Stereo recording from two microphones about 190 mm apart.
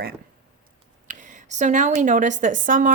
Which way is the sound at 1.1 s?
40° right (ahead or behind).